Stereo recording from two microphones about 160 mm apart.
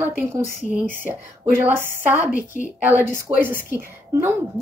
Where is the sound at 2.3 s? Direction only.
55° left (ahead or behind).